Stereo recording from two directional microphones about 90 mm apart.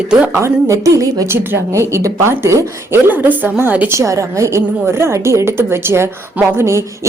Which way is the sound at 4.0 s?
35° right (ahead or behind).